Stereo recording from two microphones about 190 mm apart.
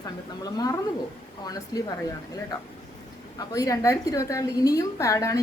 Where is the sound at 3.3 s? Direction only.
20° left (ahead or behind).